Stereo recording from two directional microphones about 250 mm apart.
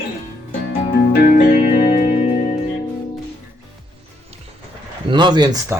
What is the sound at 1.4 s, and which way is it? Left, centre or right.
Music, left.